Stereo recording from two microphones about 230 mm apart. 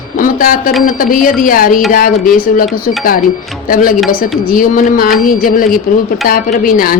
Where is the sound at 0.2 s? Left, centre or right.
Left.